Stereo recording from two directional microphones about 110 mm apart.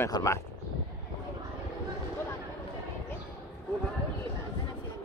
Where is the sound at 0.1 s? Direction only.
30° left (ahead or behind).